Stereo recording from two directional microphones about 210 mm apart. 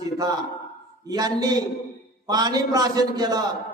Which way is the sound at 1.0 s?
15° right (ahead or behind).